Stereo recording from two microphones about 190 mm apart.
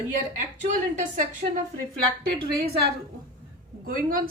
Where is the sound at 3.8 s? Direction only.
50° right (ahead or behind).